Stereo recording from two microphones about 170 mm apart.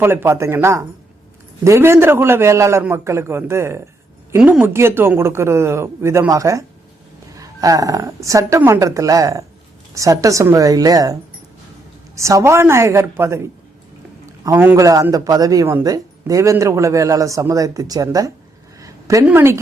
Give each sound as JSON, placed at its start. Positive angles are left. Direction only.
{"t": 0.0, "sound": "speech", "side_deg": -15}
{"t": 14.4, "sound": "speech", "side_deg": -15}
{"t": 18.8, "sound": "a sound", "side_deg": -20}